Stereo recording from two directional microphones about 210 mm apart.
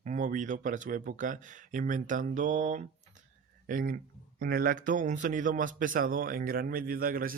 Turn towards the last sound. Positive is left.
turn(degrees=-40)  # may be behind; listen again after turning